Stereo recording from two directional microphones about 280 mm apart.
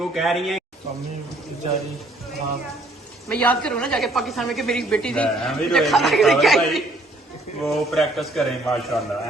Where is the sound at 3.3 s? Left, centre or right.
Centre.